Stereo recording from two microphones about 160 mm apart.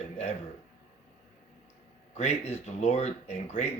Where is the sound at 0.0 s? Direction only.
45° left (ahead or behind).